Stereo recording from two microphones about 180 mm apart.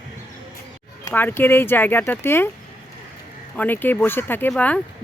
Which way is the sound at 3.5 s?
10° left (ahead or behind).